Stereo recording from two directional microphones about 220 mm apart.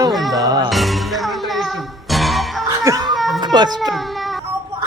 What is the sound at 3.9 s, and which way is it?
Baby cry, centre (ahead or behind).